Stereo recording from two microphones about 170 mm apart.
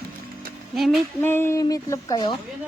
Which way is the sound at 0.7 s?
Centre (ahead or behind).